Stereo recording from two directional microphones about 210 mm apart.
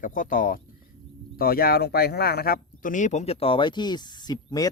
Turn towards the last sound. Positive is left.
turn(degrees=20)  # may be behind; listen again after turning